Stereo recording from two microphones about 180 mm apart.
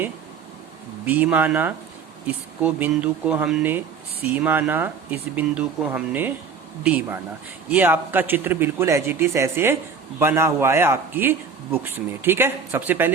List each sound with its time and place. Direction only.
1.0 s a man's voice: 10° right (ahead or behind)